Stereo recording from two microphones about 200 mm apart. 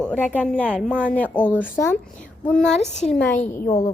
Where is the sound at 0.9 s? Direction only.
10° right (ahead or behind).